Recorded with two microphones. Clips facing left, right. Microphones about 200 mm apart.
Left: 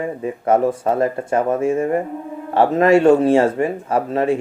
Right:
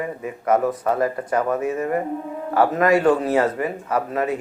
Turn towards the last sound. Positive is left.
turn(degrees=30)  # may be behind; listen again after turning